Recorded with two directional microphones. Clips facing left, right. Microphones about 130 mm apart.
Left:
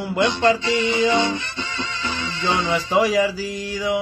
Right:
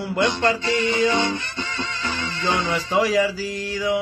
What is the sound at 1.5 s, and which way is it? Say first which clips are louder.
Music: even; 50° right (ahead or behind).